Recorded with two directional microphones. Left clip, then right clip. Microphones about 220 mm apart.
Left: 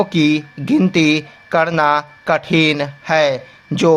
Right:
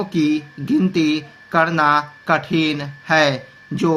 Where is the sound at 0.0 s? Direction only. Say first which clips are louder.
Left 4 dB; 45° left (ahead or behind).